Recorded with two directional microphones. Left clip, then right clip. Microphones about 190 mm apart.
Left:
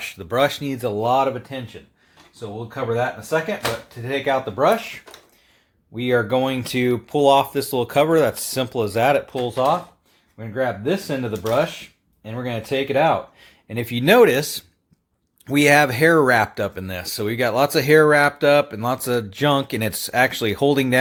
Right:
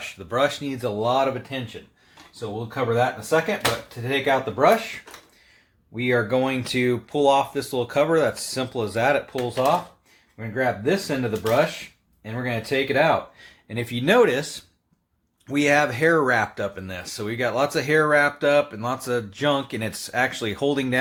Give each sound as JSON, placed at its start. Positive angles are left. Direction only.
{"t": 0.0, "sound": "speech", "side_deg": 45}
{"t": 2.7, "sound": "speech", "side_deg": 20}
{"t": 6.0, "sound": "speech", "side_deg": 35}
{"t": 10.3, "sound": "speech", "side_deg": 25}